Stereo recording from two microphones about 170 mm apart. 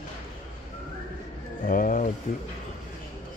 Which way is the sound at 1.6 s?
50° left (ahead or behind).